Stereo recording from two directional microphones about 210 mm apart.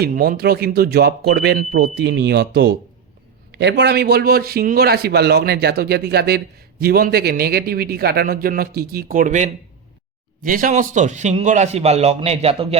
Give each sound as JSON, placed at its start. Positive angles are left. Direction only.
{"t": 0.0, "sound": "a man's voice", "side_deg": -45}